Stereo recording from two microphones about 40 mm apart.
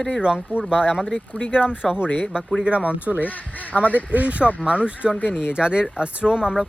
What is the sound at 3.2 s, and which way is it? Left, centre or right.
Speech, left.